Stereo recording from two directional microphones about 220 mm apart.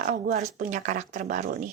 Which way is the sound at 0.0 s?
45° right (ahead or behind).